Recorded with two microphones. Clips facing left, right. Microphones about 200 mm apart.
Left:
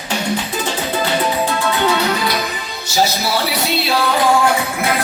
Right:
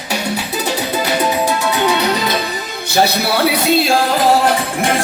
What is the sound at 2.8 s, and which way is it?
Music, 60° right (ahead or behind).